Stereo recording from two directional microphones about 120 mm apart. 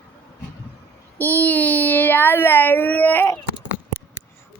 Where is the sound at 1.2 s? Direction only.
15° left (ahead or behind).